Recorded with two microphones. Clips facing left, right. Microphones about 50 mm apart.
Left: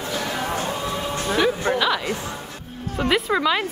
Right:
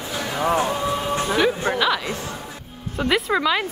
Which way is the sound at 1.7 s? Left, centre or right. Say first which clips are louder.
Even; centre.